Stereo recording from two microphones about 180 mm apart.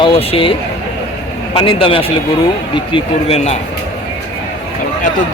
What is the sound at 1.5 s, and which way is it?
Speech, 30° left (ahead or behind).